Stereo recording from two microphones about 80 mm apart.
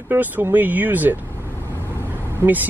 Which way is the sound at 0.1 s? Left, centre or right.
Right.